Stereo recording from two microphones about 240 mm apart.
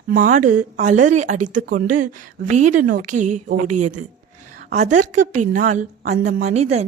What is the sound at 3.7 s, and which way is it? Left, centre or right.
Speech, right.